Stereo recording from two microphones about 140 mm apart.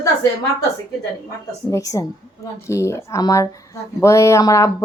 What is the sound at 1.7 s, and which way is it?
Speech, 25° left (ahead or behind).